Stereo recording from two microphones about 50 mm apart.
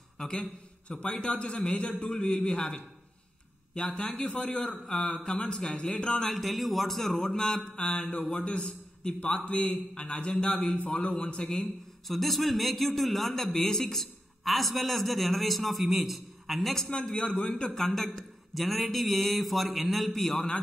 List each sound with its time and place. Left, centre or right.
0.2 s a man's voice: centre
6.3 s a man's voice: centre
12.1 s a man's voice: centre
16.9 s a man's voice: centre